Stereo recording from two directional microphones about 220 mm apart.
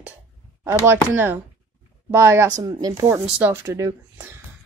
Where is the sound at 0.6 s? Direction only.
10° right (ahead or behind).